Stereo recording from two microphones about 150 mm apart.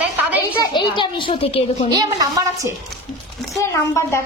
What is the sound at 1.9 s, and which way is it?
Speech, 25° right (ahead or behind).